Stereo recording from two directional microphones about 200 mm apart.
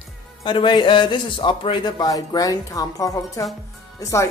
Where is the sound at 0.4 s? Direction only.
25° left (ahead or behind).